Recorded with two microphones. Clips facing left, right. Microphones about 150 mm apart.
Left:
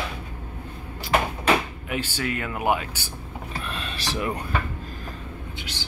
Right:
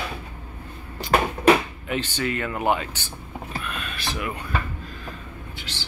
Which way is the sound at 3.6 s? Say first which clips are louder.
Even; 30° left (ahead or behind).